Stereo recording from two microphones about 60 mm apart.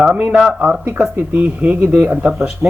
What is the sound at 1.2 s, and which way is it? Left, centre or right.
Speech, right.